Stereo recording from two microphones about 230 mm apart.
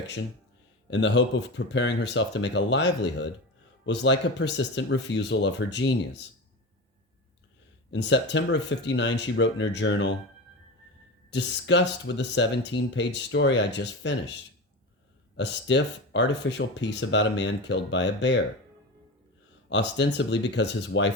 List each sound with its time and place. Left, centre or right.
0.9 s speech: left
7.9 s speech: left
11.3 s speech: left
15.4 s speech: left
19.7 s speech: left